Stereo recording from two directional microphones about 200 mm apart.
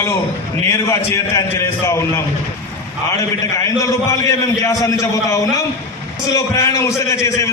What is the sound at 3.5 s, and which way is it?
A man's voice, 15° left (ahead or behind).